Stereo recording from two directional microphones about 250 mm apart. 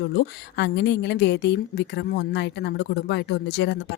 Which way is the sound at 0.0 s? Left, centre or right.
Left.